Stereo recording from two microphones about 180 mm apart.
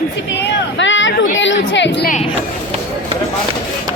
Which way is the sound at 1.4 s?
90° left.